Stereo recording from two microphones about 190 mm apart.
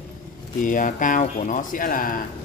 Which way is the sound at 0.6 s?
45° left (ahead or behind).